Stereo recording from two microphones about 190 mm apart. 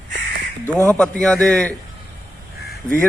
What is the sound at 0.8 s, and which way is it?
Speech, 5° left (ahead or behind).